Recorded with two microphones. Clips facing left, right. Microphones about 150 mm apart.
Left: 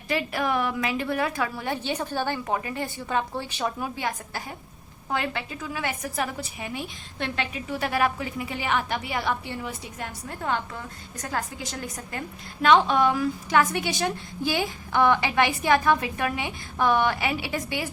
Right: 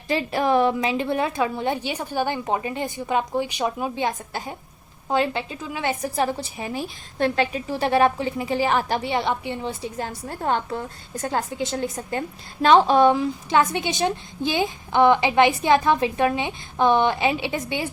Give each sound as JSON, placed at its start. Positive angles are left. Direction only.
{"t": 0.1, "sound": "a woman's voice", "side_deg": -30}